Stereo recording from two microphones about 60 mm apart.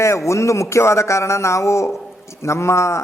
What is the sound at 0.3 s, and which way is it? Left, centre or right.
A man's voice, left.